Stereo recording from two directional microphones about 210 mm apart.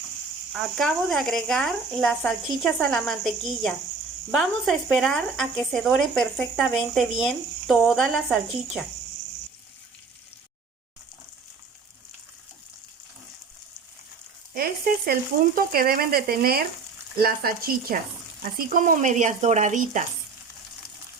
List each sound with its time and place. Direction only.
0.8 s speech: centre (ahead or behind)
14.5 s speech: 45° right (ahead or behind)
15.5 s frying: 45° right (ahead or behind)
18.5 s speech: 40° right (ahead or behind)